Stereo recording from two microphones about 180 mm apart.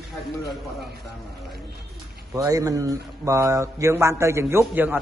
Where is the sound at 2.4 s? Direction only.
20° right (ahead or behind).